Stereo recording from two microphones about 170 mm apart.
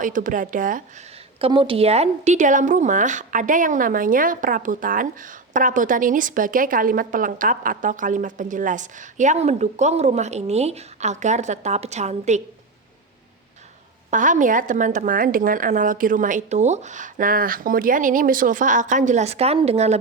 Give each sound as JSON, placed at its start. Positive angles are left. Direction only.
{"t": 0.0, "sound": "a woman's voice", "side_deg": -50}
{"t": 1.4, "sound": "a woman's voice", "side_deg": -30}
{"t": 14.1, "sound": "a woman's voice", "side_deg": -50}